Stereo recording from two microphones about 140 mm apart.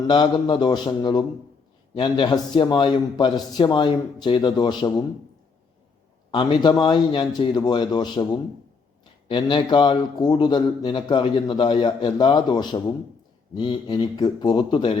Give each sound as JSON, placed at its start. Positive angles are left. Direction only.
{"t": 0.1, "sound": "a man's voice", "side_deg": 35}
{"t": 6.3, "sound": "a man's voice", "side_deg": 35}